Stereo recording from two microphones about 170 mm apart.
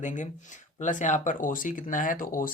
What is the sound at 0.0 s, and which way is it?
Speech, 45° left (ahead or behind).